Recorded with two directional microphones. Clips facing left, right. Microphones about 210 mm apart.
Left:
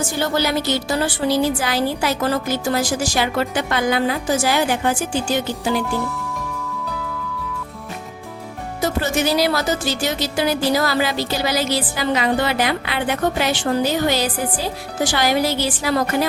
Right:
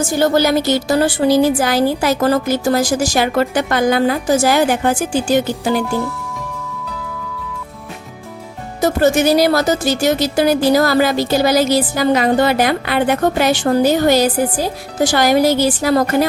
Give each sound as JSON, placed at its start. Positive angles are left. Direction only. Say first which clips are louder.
{"t": 0.2, "sound": "speech", "louder": "right 7 dB", "side_deg": -45}
{"t": 8.8, "sound": "speech", "louder": "right 7 dB", "side_deg": -45}